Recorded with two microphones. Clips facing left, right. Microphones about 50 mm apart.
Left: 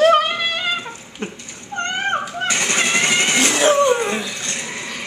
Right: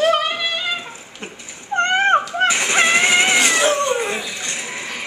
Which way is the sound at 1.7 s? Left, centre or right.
Right.